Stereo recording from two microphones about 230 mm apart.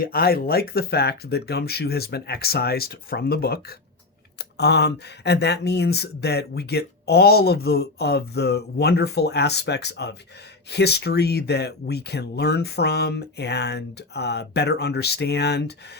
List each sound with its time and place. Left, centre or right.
0.0 s speech: left